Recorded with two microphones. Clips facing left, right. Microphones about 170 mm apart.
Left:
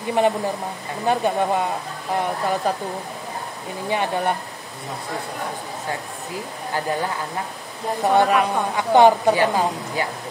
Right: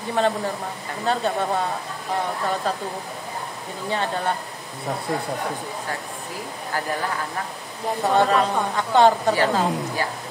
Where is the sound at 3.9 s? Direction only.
15° left (ahead or behind).